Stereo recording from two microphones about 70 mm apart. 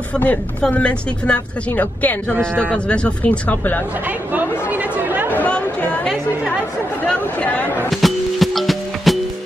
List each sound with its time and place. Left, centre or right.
0.1 s a woman's voice: centre
4.3 s chatter: right
7.1 s speech: centre
7.9 s music: centre